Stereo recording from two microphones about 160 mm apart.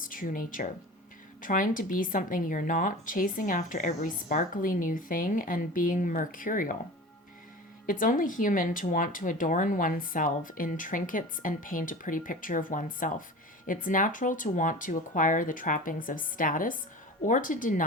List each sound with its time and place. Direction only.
0.0 s a woman's voice: 60° left (ahead or behind)
7.9 s a woman's voice: 55° left (ahead or behind)